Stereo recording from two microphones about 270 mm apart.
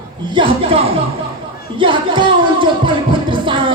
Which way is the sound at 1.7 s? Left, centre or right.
Centre.